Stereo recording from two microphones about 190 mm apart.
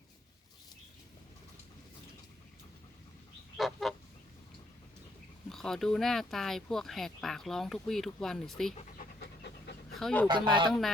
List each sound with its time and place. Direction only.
3.6 s goose: centre (ahead or behind)
5.5 s speech: centre (ahead or behind)
9.2 s pant: 65° left (ahead or behind)
10.0 s speech: 5° left (ahead or behind)
10.2 s speech: 25° right (ahead or behind)